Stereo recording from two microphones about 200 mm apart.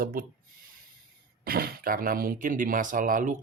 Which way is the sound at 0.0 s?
45° right (ahead or behind).